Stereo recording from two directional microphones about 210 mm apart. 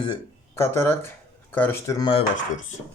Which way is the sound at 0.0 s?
15° left (ahead or behind).